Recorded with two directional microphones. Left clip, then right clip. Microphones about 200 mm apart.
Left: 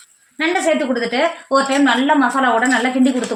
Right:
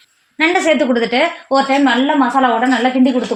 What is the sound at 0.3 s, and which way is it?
Speech, 50° right (ahead or behind).